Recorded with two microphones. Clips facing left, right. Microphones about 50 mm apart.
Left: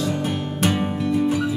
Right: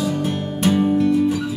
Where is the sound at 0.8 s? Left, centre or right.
Centre.